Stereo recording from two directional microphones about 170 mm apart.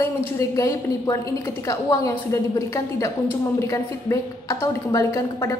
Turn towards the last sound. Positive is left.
turn(degrees=15)  # may be behind; listen again after turning